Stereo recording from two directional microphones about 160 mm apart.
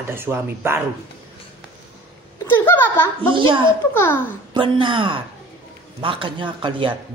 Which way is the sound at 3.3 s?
30° right (ahead or behind).